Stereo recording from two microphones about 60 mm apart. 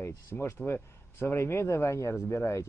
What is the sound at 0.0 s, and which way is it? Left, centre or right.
Speech, left.